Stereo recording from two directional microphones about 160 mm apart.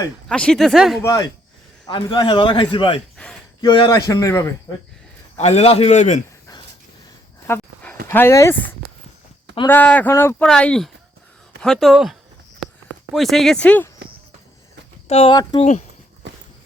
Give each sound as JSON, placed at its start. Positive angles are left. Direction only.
{"t": 0.3, "sound": "speech", "side_deg": 5}
{"t": 1.0, "sound": "a man's voice", "side_deg": 25}
{"t": 5.4, "sound": "a man's voice", "side_deg": 45}
{"t": 7.4, "sound": "dog", "side_deg": 10}
{"t": 8.0, "sound": "speech", "side_deg": 15}
{"t": 9.6, "sound": "speech", "side_deg": 10}
{"t": 13.1, "sound": "speech", "side_deg": 0}
{"t": 15.0, "sound": "a man's voice", "side_deg": 40}